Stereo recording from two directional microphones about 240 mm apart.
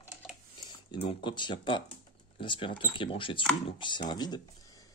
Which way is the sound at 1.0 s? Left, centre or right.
Centre.